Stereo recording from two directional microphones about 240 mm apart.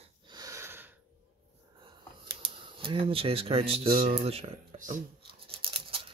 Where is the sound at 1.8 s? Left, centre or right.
Centre.